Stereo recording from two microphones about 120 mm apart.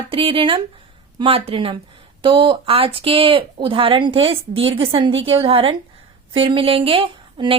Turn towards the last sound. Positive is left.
turn(degrees=-45)  # may be behind; listen again after turning